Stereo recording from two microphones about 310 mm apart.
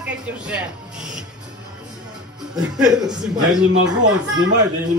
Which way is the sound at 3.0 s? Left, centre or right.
Centre.